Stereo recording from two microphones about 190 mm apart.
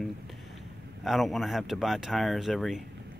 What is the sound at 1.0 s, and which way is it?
Speech, centre (ahead or behind).